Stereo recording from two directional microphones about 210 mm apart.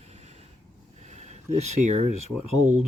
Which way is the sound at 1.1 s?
30° right (ahead or behind).